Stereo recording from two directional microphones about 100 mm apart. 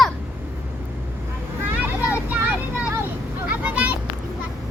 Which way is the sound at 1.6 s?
20° right (ahead or behind).